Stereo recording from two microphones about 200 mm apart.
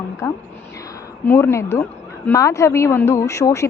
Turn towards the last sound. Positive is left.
turn(degrees=15)  # may be behind; listen again after turning